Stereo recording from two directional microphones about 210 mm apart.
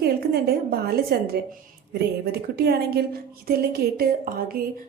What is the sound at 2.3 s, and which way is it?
Speech, 50° right (ahead or behind).